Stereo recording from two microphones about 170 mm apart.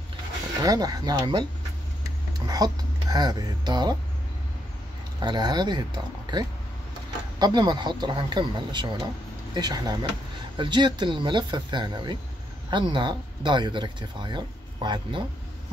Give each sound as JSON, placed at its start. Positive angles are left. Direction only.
{"t": 0.6, "sound": "speech", "side_deg": -20}
{"t": 2.4, "sound": "speech", "side_deg": -20}
{"t": 5.2, "sound": "speech", "side_deg": -25}